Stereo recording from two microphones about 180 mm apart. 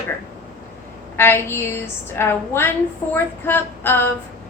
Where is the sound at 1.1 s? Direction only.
10° left (ahead or behind).